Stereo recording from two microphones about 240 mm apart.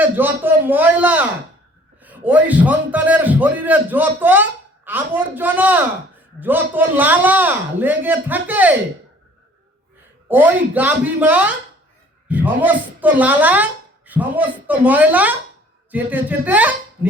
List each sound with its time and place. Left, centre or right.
0.0 s a man's voice: centre
10.2 s a man's voice: centre